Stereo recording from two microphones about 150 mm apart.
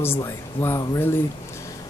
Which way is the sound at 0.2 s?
20° left (ahead or behind).